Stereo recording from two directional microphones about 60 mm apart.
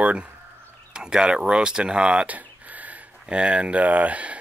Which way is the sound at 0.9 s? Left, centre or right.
Centre.